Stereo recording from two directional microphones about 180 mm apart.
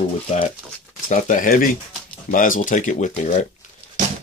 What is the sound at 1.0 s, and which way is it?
Speech, 50° left (ahead or behind).